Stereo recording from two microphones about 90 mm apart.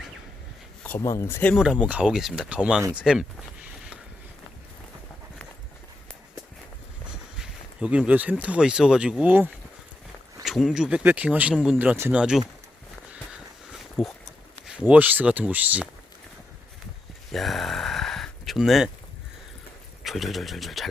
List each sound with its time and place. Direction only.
1.0 s speech: 35° left (ahead or behind)
1.5 s speech: 10° right (ahead or behind)
7.1 s speech: 10° right (ahead or behind)
10.4 s speech: centre (ahead or behind)
14.0 s speech: centre (ahead or behind)
14.7 s speech: 15° right (ahead or behind)
17.3 s a sound: centre (ahead or behind)
20.1 s speech: centre (ahead or behind)